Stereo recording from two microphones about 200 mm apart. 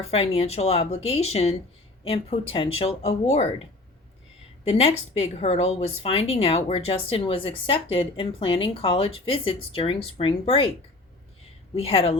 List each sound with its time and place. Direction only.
0.0 s a woman's voice: 30° left (ahead or behind)
4.6 s a woman's voice: 30° left (ahead or behind)
11.7 s a woman's voice: 30° left (ahead or behind)